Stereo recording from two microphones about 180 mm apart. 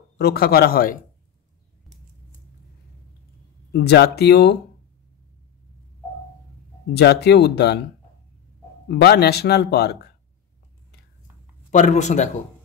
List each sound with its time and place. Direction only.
0.2 s speech: 60° left (ahead or behind)
3.7 s speech: 65° left (ahead or behind)
6.9 s speech: 65° left (ahead or behind)
8.8 s speech: 65° left (ahead or behind)
11.7 s speech: 45° left (ahead or behind)